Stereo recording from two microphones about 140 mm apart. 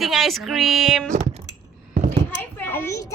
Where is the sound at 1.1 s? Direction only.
50° right (ahead or behind).